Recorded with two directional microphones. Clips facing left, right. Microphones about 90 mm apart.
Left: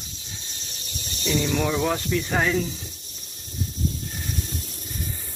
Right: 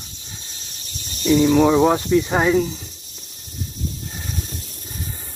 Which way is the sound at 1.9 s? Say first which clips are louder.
Right 8 dB; 25° right (ahead or behind).